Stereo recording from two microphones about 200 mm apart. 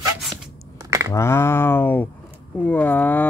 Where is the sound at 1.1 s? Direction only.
15° left (ahead or behind).